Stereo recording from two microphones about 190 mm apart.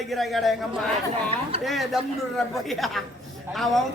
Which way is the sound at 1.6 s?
Centre (ahead or behind).